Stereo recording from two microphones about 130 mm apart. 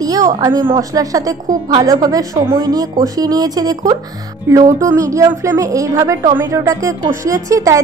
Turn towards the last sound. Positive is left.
turn(degrees=-25)  # may be behind; listen again after turning